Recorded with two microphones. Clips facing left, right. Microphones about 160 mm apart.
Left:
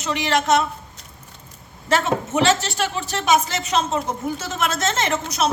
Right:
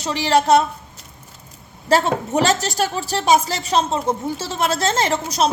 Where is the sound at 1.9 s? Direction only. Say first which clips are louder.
Right 3 dB; 35° right (ahead or behind).